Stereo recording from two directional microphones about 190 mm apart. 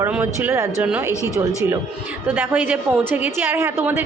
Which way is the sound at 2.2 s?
10° right (ahead or behind).